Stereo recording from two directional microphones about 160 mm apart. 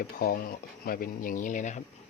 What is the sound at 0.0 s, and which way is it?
Speech, 65° left (ahead or behind).